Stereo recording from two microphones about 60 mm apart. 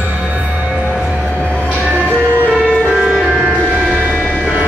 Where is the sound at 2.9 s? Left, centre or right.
Centre.